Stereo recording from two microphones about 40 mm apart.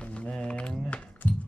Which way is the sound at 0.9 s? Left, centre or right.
Left.